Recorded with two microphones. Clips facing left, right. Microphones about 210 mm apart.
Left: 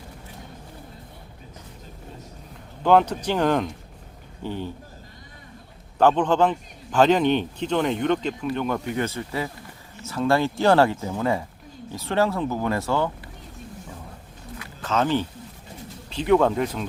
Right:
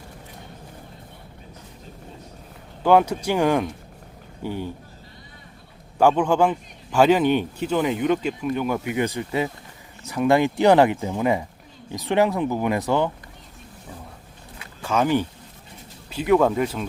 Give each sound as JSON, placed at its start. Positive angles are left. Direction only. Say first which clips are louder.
{"t": 2.8, "sound": "a man's voice", "louder": "right 1 dB", "side_deg": -10}
{"t": 6.0, "sound": "a man's voice", "louder": "right 1 dB", "side_deg": -10}
{"t": 14.8, "sound": "speech", "louder": "right 2 dB", "side_deg": -10}